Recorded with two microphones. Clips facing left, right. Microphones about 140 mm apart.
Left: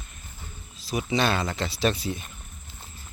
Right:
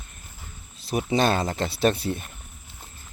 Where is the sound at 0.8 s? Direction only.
60° right (ahead or behind).